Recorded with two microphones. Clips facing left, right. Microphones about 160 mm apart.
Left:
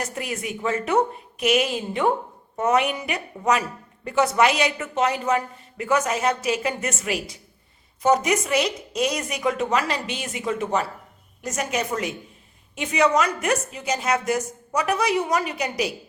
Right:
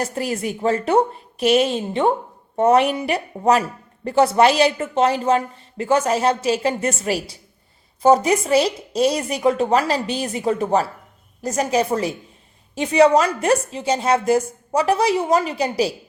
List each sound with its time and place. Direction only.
0.0 s a woman's voice: 35° right (ahead or behind)